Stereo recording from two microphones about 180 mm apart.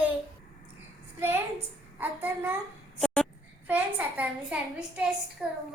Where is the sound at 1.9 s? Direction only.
10° right (ahead or behind).